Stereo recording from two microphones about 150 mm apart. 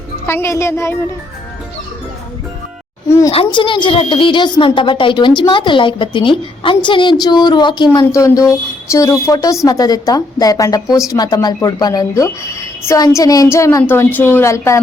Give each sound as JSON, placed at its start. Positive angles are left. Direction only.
{"t": 0.3, "sound": "a woman's voice", "side_deg": 15}
{"t": 3.3, "sound": "speech", "side_deg": 35}
{"t": 10.8, "sound": "speech", "side_deg": -5}
{"t": 11.1, "sound": "a woman's voice", "side_deg": 25}